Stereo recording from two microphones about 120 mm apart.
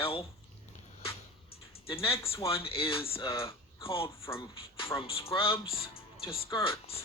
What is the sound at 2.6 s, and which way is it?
Speech, 50° left (ahead or behind).